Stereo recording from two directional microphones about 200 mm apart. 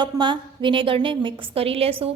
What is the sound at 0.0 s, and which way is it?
A woman's voice, 25° right (ahead or behind).